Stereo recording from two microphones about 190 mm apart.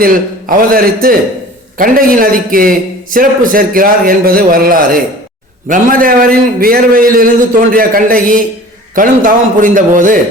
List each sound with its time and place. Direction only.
0.0 s a man's voice: 45° right (ahead or behind)